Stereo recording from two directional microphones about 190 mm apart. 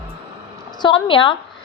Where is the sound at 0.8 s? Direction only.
25° left (ahead or behind).